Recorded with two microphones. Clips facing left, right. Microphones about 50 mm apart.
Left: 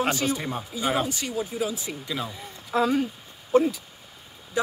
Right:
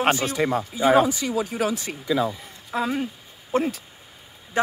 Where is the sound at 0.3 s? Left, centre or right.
Right.